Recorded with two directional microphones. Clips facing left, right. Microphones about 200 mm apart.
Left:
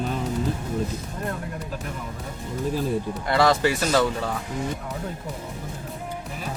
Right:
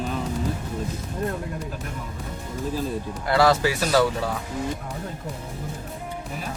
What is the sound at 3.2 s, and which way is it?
Speech, 5° right (ahead or behind).